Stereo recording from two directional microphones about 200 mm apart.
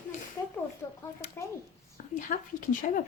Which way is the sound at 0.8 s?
10° left (ahead or behind).